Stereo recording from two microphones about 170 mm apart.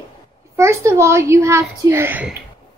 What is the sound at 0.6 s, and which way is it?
A child's voice, 15° right (ahead or behind).